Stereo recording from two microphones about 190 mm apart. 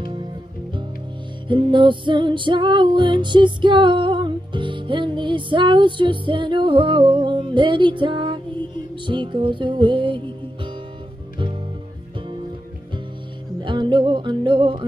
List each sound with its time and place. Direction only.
1.5 s music: 25° right (ahead or behind)
13.6 s music: 25° right (ahead or behind)